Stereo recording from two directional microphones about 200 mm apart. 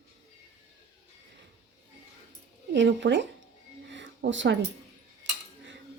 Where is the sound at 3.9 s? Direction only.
65° right (ahead or behind).